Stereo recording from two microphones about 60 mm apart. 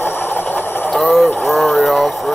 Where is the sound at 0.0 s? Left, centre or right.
Left.